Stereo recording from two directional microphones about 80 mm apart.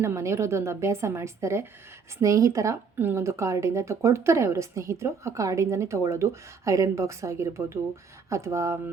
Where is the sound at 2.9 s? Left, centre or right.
Right.